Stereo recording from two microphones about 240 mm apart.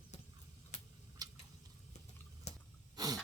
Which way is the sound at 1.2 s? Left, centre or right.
Centre.